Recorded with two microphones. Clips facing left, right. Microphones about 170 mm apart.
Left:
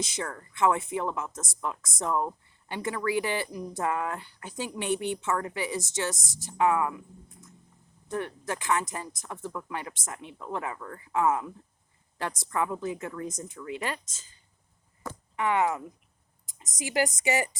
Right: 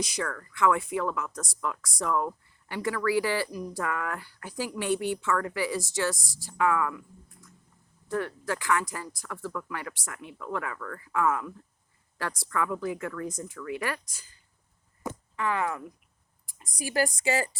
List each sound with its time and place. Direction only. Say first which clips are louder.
0.0 s speech: right 2 dB; 25° left (ahead or behind)
15.1 s speech: right 4 dB; 15° right (ahead or behind)
15.4 s speech: left 4 dB; 20° left (ahead or behind)